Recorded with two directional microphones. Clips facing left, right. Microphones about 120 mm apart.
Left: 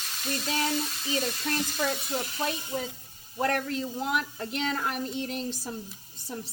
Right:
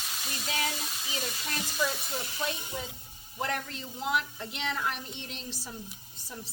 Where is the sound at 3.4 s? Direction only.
50° left (ahead or behind).